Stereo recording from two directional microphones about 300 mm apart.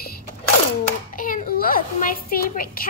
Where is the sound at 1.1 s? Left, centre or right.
Left.